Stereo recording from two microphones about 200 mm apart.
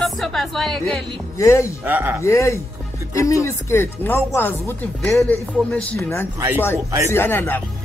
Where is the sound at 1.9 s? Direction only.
10° right (ahead or behind).